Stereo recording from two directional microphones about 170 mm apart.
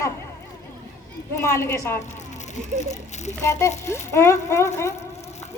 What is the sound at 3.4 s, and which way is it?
A woman's voice, 15° left (ahead or behind).